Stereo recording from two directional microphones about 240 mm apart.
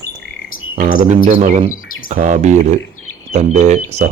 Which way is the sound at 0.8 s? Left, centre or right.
Right.